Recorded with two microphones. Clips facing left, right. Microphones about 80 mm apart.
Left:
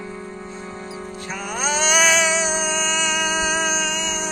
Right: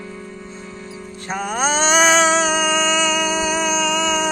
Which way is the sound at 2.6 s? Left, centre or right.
Right.